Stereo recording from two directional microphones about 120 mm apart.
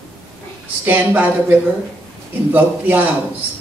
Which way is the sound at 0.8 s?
15° right (ahead or behind).